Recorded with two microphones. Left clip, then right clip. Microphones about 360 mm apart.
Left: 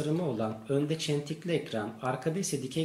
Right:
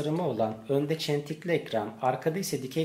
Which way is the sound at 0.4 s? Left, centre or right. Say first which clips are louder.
Right 3 dB; centre.